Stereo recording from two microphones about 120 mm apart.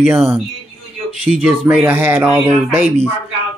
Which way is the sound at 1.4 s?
10° right (ahead or behind).